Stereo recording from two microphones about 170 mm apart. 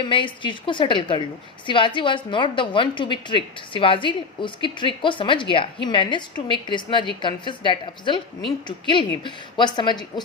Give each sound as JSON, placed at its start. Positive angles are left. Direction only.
{"t": 0.0, "sound": "a woman's voice", "side_deg": 30}